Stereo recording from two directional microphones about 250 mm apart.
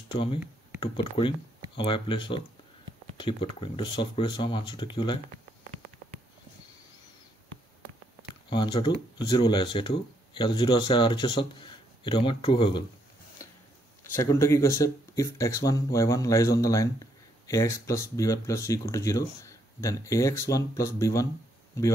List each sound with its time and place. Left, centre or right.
0.1 s speech: centre
8.5 s speech: centre
13.4 s a sound: centre
14.1 s speech: centre